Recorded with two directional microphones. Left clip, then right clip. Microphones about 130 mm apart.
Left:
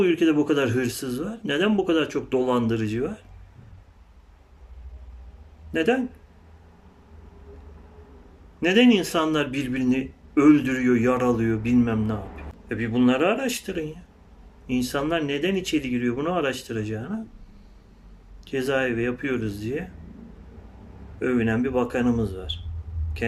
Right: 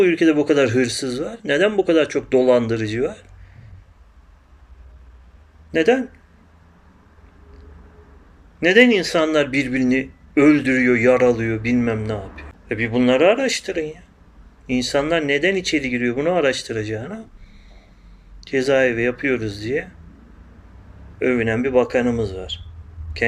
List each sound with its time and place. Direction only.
0.0 s speech: 25° left (ahead or behind)
5.7 s speech: 20° left (ahead or behind)
8.6 s speech: 20° left (ahead or behind)
18.4 s speech: 20° left (ahead or behind)
21.2 s speech: 20° left (ahead or behind)